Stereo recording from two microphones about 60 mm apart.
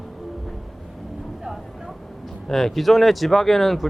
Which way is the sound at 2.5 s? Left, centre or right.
Centre.